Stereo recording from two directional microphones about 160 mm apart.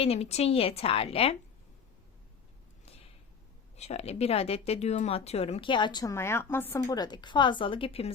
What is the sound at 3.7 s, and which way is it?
Speech, 40° left (ahead or behind).